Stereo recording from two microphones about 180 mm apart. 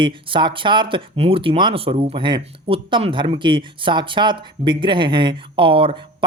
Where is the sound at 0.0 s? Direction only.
30° right (ahead or behind).